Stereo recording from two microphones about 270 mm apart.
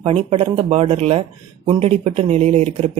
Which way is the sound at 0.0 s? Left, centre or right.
Right.